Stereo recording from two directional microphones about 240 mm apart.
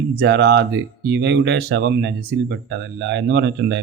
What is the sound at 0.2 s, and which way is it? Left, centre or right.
Speech, right.